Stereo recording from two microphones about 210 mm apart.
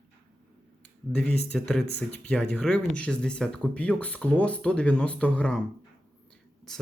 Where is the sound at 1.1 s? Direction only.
5° left (ahead or behind).